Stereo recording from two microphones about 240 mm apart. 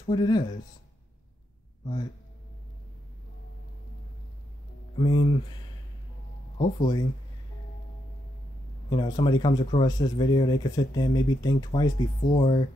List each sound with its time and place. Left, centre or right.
0.0 s speech: centre
4.9 s speech: left
6.6 s speech: centre
8.9 s speech: centre